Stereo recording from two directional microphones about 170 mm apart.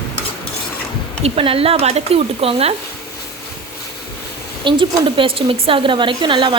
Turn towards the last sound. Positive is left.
turn(degrees=-30)  # may be behind; listen again after turning